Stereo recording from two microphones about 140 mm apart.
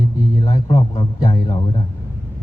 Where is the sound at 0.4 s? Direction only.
30° left (ahead or behind).